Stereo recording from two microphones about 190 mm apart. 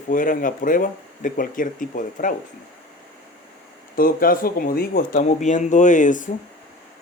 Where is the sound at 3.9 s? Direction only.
50° left (ahead or behind).